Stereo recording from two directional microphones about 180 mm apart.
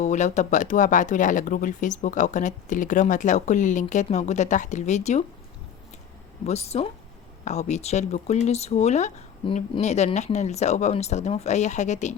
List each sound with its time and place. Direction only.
0.0 s speech: 40° left (ahead or behind)
6.4 s speech: 35° left (ahead or behind)